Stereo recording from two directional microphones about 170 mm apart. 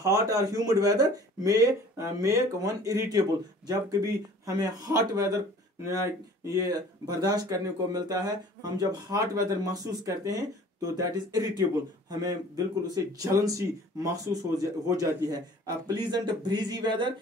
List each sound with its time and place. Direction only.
0.0 s speech: 20° right (ahead or behind)